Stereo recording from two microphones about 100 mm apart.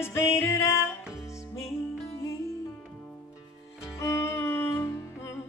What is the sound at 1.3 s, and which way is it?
Music, 30° left (ahead or behind).